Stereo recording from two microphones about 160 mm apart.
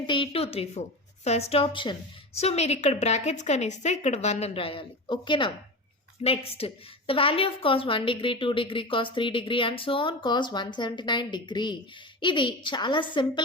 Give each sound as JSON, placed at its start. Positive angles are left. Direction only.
{"t": 0.1, "sound": "a woman's voice", "side_deg": 35}